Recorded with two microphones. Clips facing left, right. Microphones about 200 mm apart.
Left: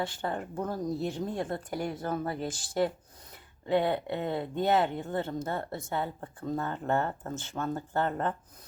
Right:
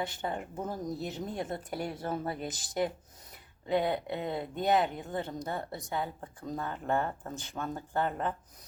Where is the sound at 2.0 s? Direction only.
25° right (ahead or behind).